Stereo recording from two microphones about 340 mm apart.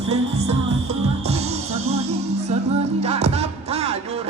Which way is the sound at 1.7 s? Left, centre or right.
Right.